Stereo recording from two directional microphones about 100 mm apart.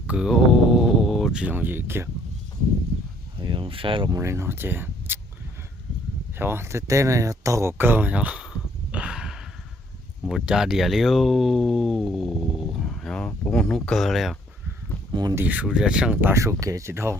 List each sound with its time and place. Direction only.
0.1 s a sound: 5° right (ahead or behind)
1.5 s speech: 20° right (ahead or behind)
3.4 s speech: 55° right (ahead or behind)
4.1 s speech: 30° right (ahead or behind)
6.3 s speech: 25° right (ahead or behind); by 14.3 s centre (ahead or behind)
15.1 s speech: 40° right (ahead or behind)
15.4 s speech: 15° right (ahead or behind)
16.2 s speech: 30° right (ahead or behind)